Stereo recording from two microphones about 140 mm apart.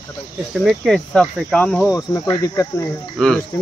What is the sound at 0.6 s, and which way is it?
Speech, centre (ahead or behind).